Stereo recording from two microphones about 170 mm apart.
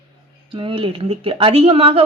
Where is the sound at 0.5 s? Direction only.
30° right (ahead or behind).